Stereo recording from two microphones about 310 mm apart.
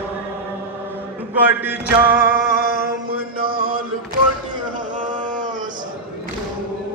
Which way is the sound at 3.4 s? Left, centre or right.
Right.